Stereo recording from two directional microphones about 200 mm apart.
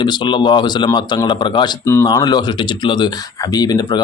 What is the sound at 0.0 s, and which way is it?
Speech, 25° left (ahead or behind).